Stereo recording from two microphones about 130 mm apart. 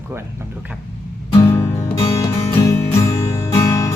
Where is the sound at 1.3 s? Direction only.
20° left (ahead or behind).